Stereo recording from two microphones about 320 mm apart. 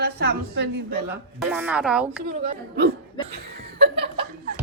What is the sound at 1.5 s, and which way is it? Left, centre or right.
Speech, centre.